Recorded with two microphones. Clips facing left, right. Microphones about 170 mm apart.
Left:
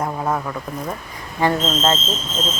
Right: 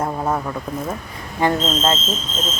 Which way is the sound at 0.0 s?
5° right (ahead or behind).